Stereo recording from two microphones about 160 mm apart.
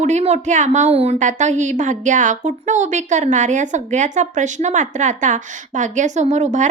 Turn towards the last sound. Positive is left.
turn(degrees=-50)  # may be behind; listen again after turning